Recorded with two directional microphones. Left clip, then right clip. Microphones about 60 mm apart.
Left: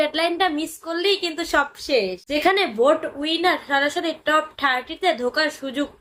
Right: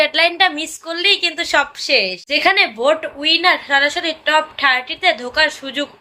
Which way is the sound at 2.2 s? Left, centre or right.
Left.